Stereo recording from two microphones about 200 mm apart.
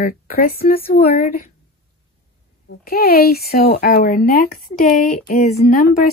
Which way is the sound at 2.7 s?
50° left (ahead or behind).